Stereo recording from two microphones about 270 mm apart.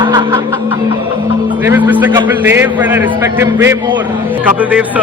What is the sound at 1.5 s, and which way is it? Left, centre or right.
A man's voice, centre.